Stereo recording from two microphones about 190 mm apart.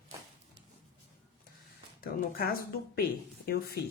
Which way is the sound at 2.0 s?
55° left (ahead or behind).